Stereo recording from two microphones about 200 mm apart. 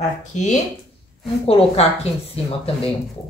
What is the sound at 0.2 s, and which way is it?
Speech, 40° left (ahead or behind).